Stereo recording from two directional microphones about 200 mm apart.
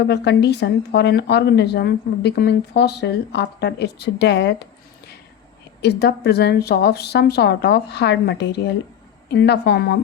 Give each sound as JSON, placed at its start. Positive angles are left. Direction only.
{"t": 0.0, "sound": "speech", "side_deg": 55}